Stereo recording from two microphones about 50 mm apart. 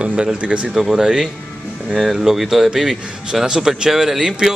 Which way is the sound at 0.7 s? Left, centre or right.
Centre.